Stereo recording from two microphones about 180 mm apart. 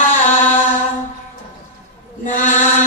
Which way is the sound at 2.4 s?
45° left (ahead or behind).